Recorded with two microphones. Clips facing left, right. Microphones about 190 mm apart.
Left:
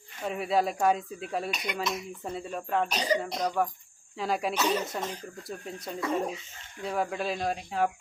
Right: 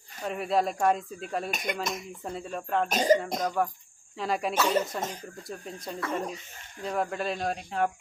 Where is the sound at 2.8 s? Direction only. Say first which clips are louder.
Right 6 dB; 45° right (ahead or behind).